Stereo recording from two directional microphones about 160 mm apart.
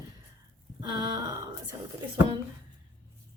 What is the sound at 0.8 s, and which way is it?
Speech, 25° right (ahead or behind).